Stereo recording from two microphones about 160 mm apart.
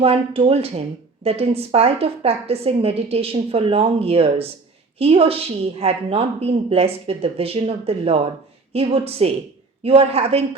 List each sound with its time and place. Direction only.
0.0 s speech: 35° right (ahead or behind)